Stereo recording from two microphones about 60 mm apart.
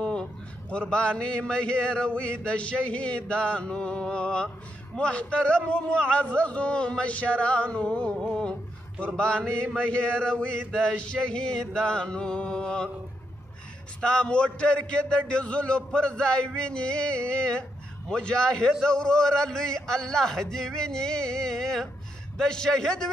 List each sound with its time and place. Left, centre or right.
0.0 s a man's voice: centre
14.0 s a man's voice: centre